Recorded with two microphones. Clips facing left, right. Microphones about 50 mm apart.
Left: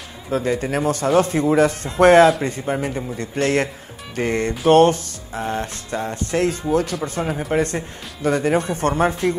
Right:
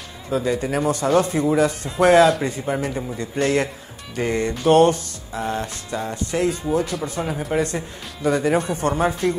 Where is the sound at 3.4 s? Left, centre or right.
Left.